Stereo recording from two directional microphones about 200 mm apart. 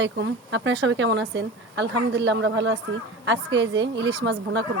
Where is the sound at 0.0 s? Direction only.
65° right (ahead or behind).